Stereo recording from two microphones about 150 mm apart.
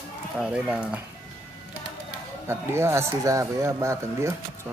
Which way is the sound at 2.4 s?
15° right (ahead or behind).